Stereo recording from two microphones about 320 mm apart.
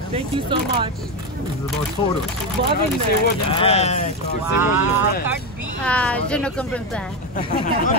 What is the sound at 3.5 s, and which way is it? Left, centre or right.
Speech, centre.